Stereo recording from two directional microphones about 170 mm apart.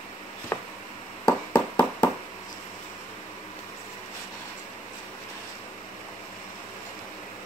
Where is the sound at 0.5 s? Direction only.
15° left (ahead or behind).